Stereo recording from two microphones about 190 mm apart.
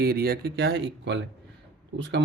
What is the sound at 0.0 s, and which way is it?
A man's voice, 55° right (ahead or behind).